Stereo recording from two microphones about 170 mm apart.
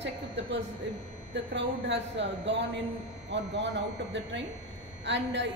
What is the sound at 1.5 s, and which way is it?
A woman's voice, 90° right.